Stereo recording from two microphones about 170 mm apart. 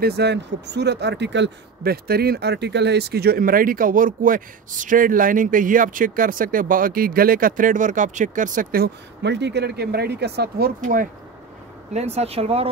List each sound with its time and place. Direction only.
0.0 s a man's voice: 75° right (ahead or behind)
10.8 s speech: 50° right (ahead or behind)
11.9 s speech: 40° right (ahead or behind)